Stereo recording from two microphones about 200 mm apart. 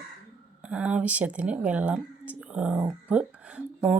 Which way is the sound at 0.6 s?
5° right (ahead or behind).